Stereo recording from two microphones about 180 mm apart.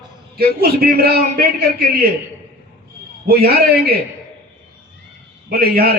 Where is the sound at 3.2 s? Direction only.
55° right (ahead or behind).